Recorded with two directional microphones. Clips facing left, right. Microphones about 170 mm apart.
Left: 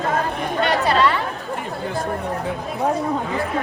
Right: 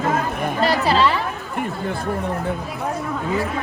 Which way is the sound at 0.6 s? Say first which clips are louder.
Even; 30° right (ahead or behind).